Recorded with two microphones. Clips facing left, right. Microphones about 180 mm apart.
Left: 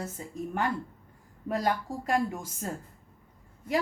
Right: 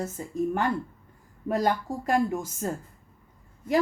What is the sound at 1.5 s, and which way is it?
Speech, 45° right (ahead or behind).